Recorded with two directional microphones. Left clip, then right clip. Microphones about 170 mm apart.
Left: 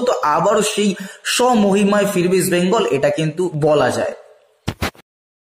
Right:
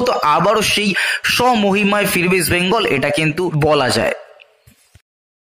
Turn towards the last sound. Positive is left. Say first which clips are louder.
# even
turn(degrees=-25)  # may be behind; listen again after turning